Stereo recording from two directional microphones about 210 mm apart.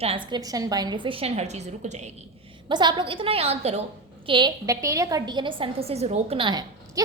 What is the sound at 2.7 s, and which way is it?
A woman's voice, 20° right (ahead or behind).